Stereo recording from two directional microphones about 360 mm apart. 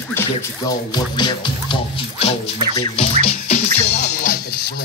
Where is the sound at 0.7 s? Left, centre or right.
Centre.